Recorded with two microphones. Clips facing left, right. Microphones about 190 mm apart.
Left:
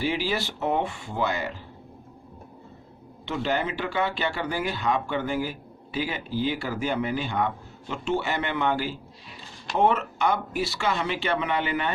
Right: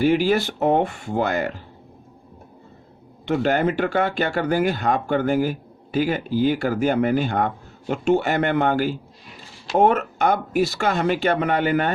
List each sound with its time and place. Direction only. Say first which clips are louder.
0.0 s speech: right 9 dB; 50° right (ahead or behind)
3.2 s speech: right 7 dB; 50° right (ahead or behind)